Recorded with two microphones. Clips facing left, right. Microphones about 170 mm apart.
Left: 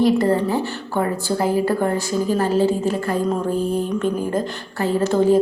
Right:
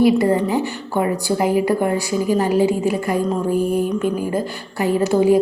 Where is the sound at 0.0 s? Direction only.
15° right (ahead or behind).